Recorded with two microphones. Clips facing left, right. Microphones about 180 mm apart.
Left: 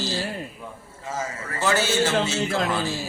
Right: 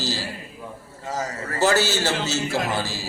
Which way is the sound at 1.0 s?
40° right (ahead or behind).